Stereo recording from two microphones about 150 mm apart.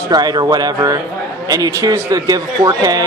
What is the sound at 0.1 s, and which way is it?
A man's voice, 25° right (ahead or behind).